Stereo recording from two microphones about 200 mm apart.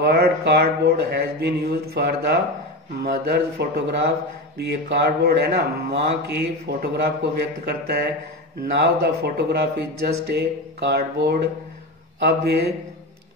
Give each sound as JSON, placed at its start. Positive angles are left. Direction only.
{"t": 0.0, "sound": "a man's voice", "side_deg": -55}
{"t": 8.7, "sound": "a man's voice", "side_deg": -60}